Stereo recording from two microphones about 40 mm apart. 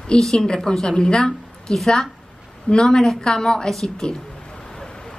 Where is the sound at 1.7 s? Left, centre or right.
Centre.